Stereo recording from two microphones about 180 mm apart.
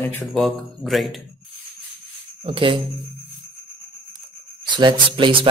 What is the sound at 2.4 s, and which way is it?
Speech, 30° right (ahead or behind).